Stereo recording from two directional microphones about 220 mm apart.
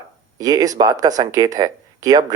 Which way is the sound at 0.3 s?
15° right (ahead or behind).